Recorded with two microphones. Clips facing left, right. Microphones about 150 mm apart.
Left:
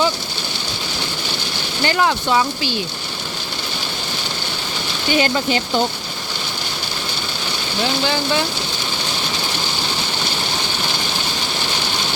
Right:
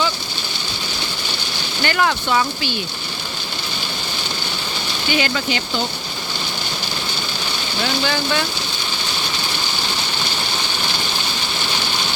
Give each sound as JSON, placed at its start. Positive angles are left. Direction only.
{"t": 1.8, "sound": "speech", "side_deg": 30}
{"t": 5.1, "sound": "speech", "side_deg": 35}
{"t": 8.0, "sound": "speech", "side_deg": 25}